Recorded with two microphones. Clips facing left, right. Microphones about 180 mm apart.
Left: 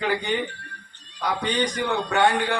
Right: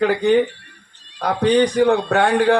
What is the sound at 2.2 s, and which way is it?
Speech, 65° right (ahead or behind).